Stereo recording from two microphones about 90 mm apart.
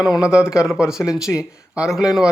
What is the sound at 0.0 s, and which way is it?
Speech, 5° right (ahead or behind).